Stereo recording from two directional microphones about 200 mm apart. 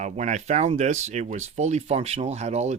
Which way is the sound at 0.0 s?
35° right (ahead or behind).